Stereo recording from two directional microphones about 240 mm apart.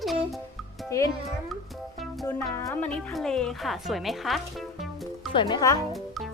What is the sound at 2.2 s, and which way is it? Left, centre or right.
Speech, centre.